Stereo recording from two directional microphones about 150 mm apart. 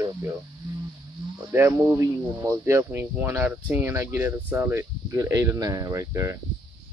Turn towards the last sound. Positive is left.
turn(degrees=-20)  # may be behind; listen again after turning